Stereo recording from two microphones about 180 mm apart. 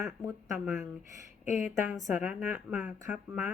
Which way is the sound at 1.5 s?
40° left (ahead or behind).